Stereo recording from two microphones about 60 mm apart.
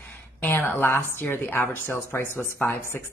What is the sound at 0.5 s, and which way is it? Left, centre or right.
Speech, left.